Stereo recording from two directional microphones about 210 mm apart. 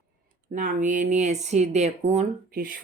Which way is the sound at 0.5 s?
40° right (ahead or behind).